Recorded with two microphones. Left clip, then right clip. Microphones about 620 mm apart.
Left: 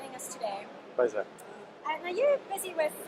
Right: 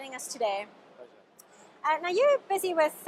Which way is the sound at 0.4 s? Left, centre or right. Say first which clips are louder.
Right 6 dB; right.